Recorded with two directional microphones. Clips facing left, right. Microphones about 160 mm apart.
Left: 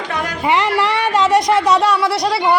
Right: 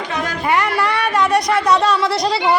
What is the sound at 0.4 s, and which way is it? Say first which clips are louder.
Music: left 2 dB; 20° left (ahead or behind).